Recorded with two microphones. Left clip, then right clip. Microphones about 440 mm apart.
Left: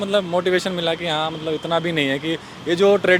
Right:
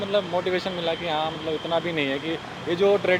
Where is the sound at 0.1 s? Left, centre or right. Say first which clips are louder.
Left 5 dB; left.